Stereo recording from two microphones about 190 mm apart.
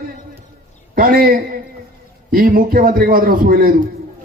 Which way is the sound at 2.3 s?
45° right (ahead or behind).